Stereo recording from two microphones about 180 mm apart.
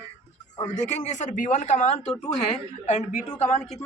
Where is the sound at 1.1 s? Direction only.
45° left (ahead or behind).